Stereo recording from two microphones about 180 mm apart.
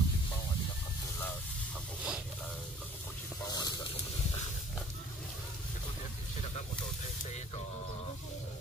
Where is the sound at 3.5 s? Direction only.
20° left (ahead or behind).